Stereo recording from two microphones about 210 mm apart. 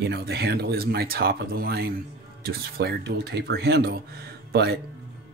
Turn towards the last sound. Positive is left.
turn(degrees=-50)  # may be behind; listen again after turning